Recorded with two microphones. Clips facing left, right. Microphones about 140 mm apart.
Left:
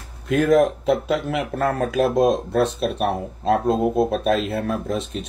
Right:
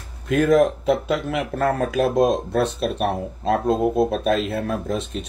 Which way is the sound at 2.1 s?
Centre (ahead or behind).